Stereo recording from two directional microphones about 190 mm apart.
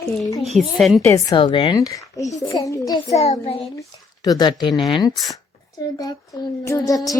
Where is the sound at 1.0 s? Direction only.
15° left (ahead or behind).